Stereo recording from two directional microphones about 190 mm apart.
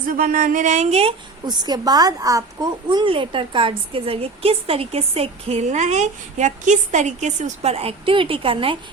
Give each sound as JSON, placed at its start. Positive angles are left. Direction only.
{"t": 0.1, "sound": "a woman's voice", "side_deg": -45}